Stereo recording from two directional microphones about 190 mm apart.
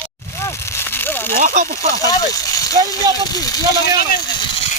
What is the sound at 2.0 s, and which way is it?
Speech, 20° left (ahead or behind).